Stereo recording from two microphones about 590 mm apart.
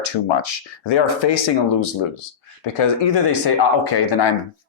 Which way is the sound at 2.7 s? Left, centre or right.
Left.